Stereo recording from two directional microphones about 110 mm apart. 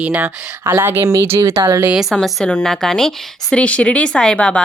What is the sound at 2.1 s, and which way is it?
A woman's voice, 5° left (ahead or behind).